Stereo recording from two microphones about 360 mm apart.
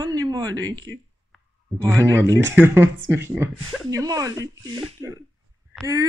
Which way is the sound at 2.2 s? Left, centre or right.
Centre.